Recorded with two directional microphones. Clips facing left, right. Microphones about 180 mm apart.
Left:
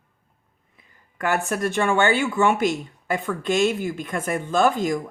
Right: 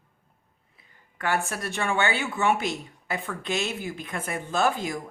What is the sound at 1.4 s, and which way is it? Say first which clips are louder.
Speech: left 7 dB; 50° left (ahead or behind).